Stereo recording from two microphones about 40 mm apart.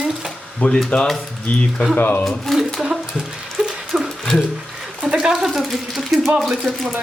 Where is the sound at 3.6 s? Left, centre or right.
Centre.